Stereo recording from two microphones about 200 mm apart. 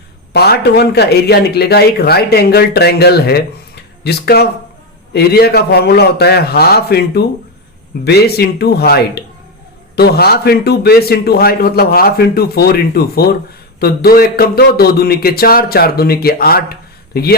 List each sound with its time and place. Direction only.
0.3 s a man's voice: 55° left (ahead or behind)